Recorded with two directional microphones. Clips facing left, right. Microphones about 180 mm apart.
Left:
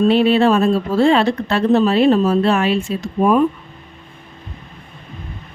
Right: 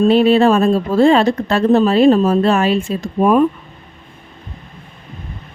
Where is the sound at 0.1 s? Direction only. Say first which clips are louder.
Right 2 dB; 45° right (ahead or behind).